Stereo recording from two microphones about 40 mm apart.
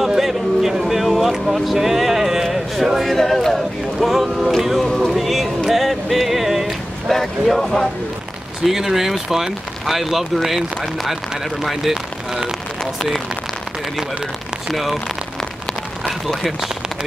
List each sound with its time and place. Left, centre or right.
0.2 s a sound: centre
1.4 s speech: centre
3.2 s a capella: centre
4.0 s a sound: centre
4.8 s music: centre
5.7 s a sound: centre
7.1 s speech: centre
8.6 s speech: centre
11.9 s speech: centre
14.7 s speech: centre
16.1 s speech: centre